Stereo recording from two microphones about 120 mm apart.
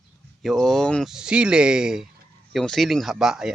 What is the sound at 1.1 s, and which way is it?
Speech, 5° right (ahead or behind).